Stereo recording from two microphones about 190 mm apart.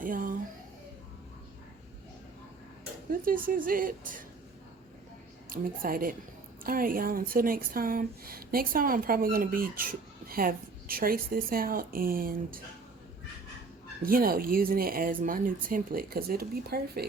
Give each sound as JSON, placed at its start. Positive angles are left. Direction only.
{"t": 0.0, "sound": "a sound", "side_deg": -45}
{"t": 3.1, "sound": "a woman's voice", "side_deg": -45}
{"t": 5.5, "sound": "a woman's voice", "side_deg": -50}
{"t": 14.0, "sound": "a woman's voice", "side_deg": -50}